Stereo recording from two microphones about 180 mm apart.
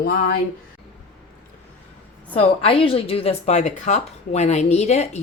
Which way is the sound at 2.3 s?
30° left (ahead or behind).